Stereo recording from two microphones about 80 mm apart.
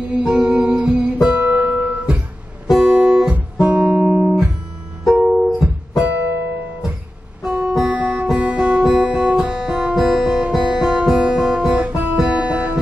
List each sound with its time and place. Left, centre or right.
0.0 s guitar: centre
1.2 s music: centre
2.7 s guitar: centre
3.5 s music: centre
7.4 s music: centre
7.7 s guitar: centre
9.5 s guitar: centre
10.2 s guitar: centre